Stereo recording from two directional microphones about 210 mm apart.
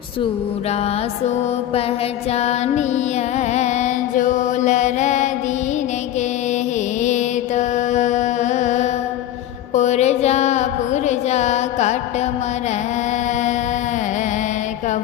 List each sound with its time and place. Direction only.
2.3 s music: 30° left (ahead or behind)
7.0 s mantra: 35° left (ahead or behind)
9.7 s music: 35° left (ahead or behind)